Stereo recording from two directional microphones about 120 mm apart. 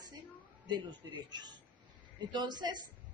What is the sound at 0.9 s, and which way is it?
A woman's voice, 35° right (ahead or behind).